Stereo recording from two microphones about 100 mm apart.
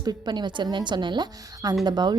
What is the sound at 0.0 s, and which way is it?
A woman's voice, 45° right (ahead or behind).